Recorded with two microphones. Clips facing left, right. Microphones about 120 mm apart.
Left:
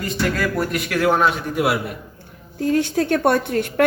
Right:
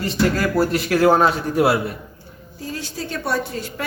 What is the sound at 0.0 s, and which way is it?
A man's voice, 30° right (ahead or behind).